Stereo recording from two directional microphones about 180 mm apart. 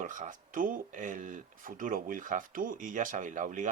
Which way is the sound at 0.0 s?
45° right (ahead or behind).